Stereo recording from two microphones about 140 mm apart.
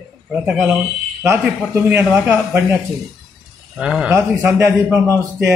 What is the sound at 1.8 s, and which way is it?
Speech, 10° right (ahead or behind).